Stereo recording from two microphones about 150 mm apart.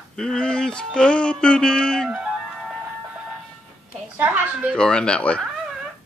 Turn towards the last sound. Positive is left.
turn(degrees=5)  # may be behind; listen again after turning